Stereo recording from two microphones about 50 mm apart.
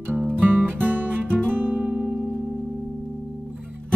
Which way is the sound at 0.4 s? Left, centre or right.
Right.